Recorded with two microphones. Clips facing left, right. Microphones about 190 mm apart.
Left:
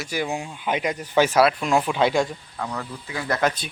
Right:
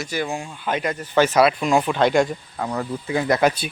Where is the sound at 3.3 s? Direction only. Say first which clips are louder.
Right 3 dB; 10° right (ahead or behind).